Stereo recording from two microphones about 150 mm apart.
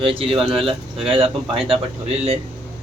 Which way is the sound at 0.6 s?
35° right (ahead or behind).